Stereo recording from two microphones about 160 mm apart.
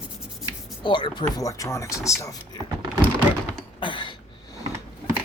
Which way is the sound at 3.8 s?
30° left (ahead or behind).